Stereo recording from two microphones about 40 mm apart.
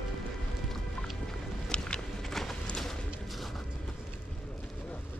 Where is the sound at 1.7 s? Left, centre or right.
Left.